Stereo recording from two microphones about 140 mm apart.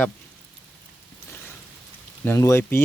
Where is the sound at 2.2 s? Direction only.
20° left (ahead or behind).